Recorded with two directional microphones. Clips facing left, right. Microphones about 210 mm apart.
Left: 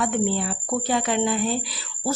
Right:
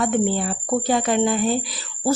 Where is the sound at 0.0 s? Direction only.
45° right (ahead or behind).